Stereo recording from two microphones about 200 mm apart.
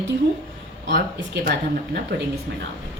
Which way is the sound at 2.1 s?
60° right (ahead or behind).